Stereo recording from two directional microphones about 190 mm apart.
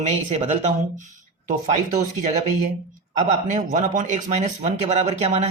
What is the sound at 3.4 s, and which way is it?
Speech, 40° right (ahead or behind).